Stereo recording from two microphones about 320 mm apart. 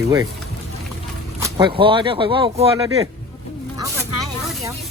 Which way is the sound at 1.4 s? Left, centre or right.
Centre.